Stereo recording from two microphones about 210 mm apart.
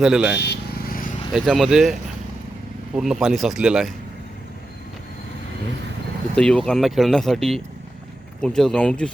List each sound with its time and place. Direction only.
0.0 s speech: 5° right (ahead or behind)
0.3 s vehicle: 50° left (ahead or behind)
1.3 s speech: centre (ahead or behind)
6.3 s speech: 5° left (ahead or behind)